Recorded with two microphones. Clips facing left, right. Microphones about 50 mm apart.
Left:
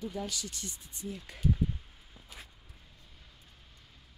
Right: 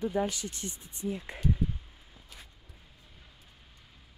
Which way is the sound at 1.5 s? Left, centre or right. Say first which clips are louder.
Even; centre.